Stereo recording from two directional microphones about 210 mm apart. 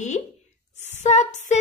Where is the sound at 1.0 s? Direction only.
35° left (ahead or behind).